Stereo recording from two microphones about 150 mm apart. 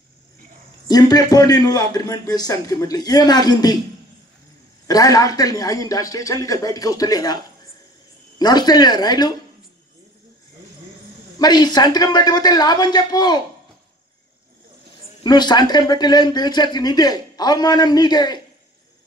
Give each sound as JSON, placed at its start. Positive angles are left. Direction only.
{"t": 0.8, "sound": "speech", "side_deg": 25}
{"t": 4.8, "sound": "speech", "side_deg": 25}
{"t": 8.4, "sound": "speech", "side_deg": 25}
{"t": 11.3, "sound": "speech", "side_deg": 25}
{"t": 15.2, "sound": "speech", "side_deg": 30}